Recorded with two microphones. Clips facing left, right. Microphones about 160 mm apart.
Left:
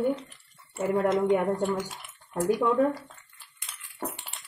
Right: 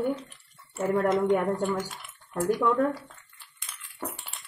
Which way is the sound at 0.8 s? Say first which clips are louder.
Even; 5° left (ahead or behind).